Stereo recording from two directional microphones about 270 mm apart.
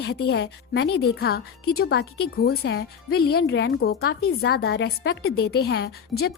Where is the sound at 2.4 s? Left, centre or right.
Left.